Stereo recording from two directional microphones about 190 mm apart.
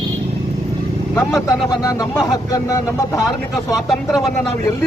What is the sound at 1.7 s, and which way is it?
Speech, 20° left (ahead or behind).